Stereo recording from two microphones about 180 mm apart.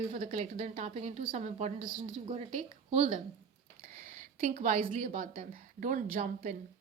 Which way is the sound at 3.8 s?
50° right (ahead or behind).